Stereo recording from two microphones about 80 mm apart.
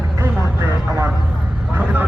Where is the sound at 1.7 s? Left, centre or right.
Right.